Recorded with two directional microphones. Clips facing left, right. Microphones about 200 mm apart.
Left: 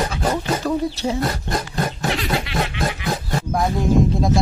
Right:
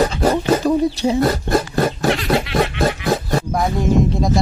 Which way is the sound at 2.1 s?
Centre (ahead or behind).